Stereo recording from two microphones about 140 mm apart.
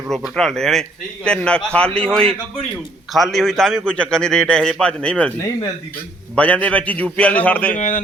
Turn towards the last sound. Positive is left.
turn(degrees=60)  # may be behind; listen again after turning